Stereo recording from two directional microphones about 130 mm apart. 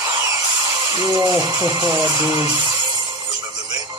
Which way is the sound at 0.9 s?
30° right (ahead or behind).